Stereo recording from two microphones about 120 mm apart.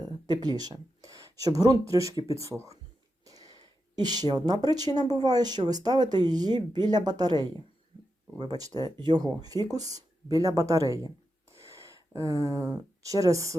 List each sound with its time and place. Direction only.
0.4 s speech: 35° right (ahead or behind)
3.2 s a sound: 30° right (ahead or behind)
4.9 s speech: 35° right (ahead or behind)